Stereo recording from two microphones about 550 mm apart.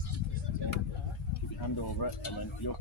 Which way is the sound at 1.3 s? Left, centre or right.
Left.